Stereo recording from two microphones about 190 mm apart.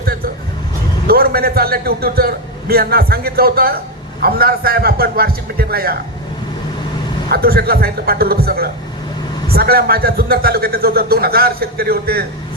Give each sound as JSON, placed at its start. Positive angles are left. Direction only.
{"t": 0.0, "sound": "vehicle", "side_deg": -50}
{"t": 1.0, "sound": "a man's voice", "side_deg": -50}
{"t": 7.3, "sound": "a man's voice", "side_deg": -55}